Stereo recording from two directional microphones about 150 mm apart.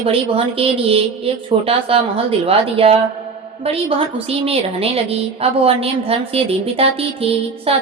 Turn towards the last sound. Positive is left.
turn(degrees=-40)  # may be behind; listen again after turning